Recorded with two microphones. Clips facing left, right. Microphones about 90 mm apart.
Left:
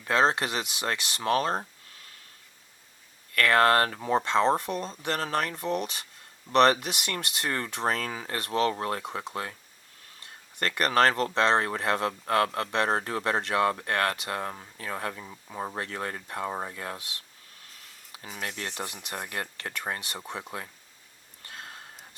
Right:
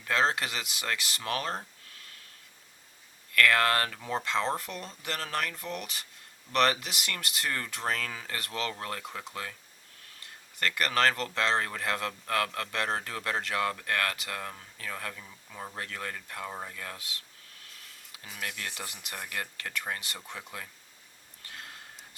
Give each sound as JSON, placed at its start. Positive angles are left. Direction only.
{"t": 0.0, "sound": "speech", "side_deg": 25}
{"t": 3.3, "sound": "speech", "side_deg": 30}
{"t": 10.6, "sound": "speech", "side_deg": 30}
{"t": 18.1, "sound": "speech", "side_deg": 30}
{"t": 21.4, "sound": "a sound", "side_deg": 25}